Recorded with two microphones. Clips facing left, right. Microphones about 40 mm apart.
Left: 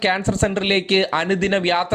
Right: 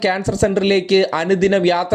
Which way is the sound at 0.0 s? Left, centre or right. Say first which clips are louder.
Right 2 dB; left.